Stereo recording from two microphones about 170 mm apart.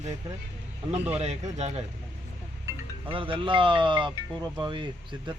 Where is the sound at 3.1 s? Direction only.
30° right (ahead or behind).